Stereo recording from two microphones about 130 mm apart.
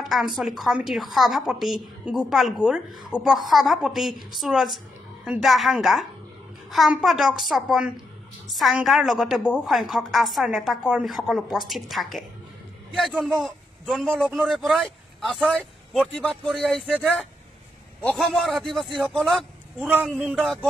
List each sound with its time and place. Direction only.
0.0 s a sound: centre (ahead or behind)
0.4 s a woman's voice: centre (ahead or behind)
18.2 s a woman's voice: centre (ahead or behind)
19.9 s a woman's voice: 10° right (ahead or behind)